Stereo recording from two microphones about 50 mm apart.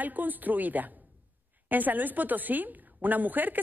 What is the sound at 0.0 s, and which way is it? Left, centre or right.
A woman's voice, right.